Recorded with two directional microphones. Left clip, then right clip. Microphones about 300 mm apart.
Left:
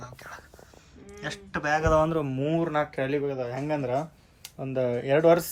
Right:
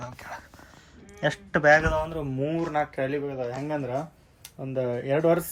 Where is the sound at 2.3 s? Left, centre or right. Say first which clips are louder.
Left 1 dB; centre.